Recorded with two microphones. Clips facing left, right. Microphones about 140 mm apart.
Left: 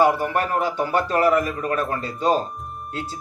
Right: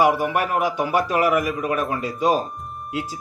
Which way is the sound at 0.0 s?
10° right (ahead or behind).